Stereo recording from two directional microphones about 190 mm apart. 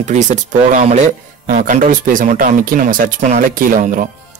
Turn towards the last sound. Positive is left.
turn(degrees=-45)  # may be behind; listen again after turning